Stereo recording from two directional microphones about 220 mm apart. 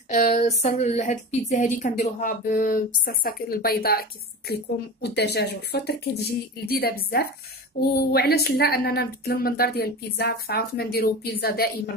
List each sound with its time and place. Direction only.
0.1 s speech: 35° left (ahead or behind)
5.0 s speech: 50° left (ahead or behind)